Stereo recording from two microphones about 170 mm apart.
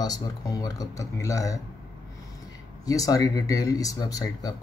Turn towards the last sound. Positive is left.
turn(degrees=20)  # may be behind; listen again after turning